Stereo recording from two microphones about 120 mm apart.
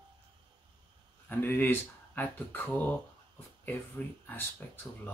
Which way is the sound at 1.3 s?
15° left (ahead or behind).